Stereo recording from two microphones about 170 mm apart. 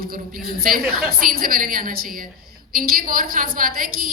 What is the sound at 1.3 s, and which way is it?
A woman's voice, 55° right (ahead or behind).